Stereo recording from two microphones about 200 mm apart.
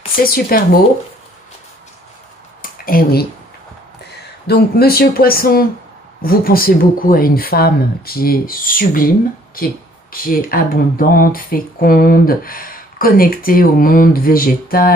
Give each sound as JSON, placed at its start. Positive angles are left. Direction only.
{"t": 0.1, "sound": "speech", "side_deg": 50}
{"t": 2.6, "sound": "a sound", "side_deg": 45}
{"t": 4.5, "sound": "speech", "side_deg": 50}
{"t": 10.2, "sound": "speech", "side_deg": 45}